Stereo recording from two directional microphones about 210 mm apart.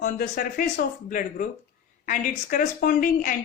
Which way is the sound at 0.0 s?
40° left (ahead or behind).